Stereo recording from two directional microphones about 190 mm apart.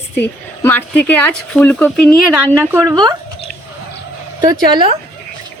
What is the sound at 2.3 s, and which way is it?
Speech, 15° right (ahead or behind).